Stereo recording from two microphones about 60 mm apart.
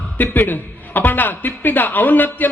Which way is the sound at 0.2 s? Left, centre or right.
Left.